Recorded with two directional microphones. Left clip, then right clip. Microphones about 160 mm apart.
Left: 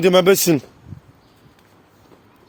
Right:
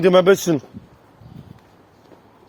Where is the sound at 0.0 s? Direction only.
80° left.